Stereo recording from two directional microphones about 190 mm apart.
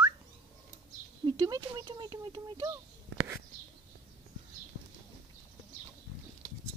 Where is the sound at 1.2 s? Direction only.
20° right (ahead or behind).